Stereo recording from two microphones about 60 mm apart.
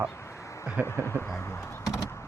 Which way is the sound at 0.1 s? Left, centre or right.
Left.